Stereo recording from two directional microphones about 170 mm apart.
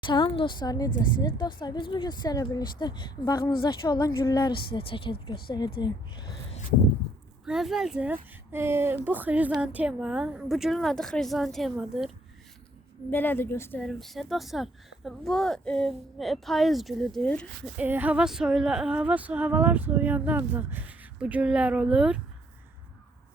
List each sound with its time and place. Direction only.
0.0 s a woman's voice: 30° left (ahead or behind)
7.4 s speech: centre (ahead or behind)
13.1 s a woman's voice: 10° left (ahead or behind)
13.8 s speech: centre (ahead or behind)
17.7 s speech: 10° right (ahead or behind)